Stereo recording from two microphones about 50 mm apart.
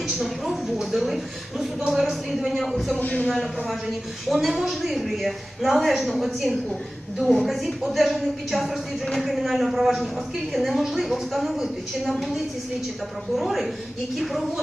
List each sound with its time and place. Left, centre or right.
0.2 s a sound: centre
1.9 s speech: centre
3.0 s a man's voice: left
3.2 s a woman's voice: centre
13.3 s a woman's voice: centre